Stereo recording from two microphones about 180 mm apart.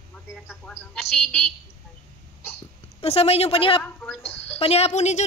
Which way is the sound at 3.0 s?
35° left (ahead or behind).